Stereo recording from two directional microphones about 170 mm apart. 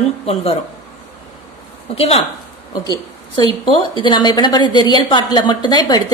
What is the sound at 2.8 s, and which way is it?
A woman's voice, 25° left (ahead or behind).